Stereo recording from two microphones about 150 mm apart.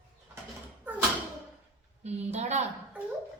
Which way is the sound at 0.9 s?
10° right (ahead or behind).